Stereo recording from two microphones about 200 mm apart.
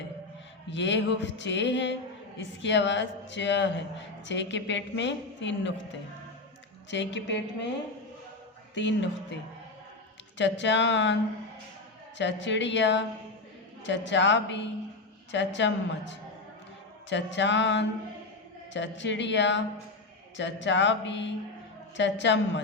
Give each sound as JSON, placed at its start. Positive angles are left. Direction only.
{"t": 0.7, "sound": "a man's voice", "side_deg": 65}
{"t": 6.9, "sound": "a man's voice", "side_deg": 65}
{"t": 8.7, "sound": "a man's voice", "side_deg": 65}